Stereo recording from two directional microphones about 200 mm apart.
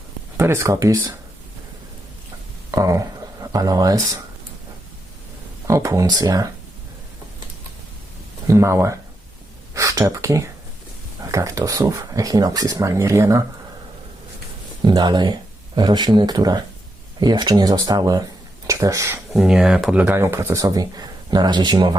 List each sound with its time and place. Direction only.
0.3 s speech: 15° right (ahead or behind)
2.7 s speech: 15° right (ahead or behind)
5.6 s speech: 15° right (ahead or behind)
8.4 s speech: 15° right (ahead or behind)
14.8 s speech: 20° right (ahead or behind)
19.3 s speech: centre (ahead or behind); by 21.9 s 20° right (ahead or behind)